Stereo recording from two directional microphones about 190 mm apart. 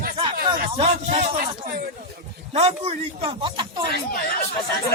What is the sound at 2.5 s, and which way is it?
A man's voice, 30° right (ahead or behind).